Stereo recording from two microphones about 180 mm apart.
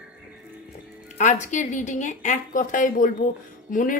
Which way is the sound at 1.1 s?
40° left (ahead or behind).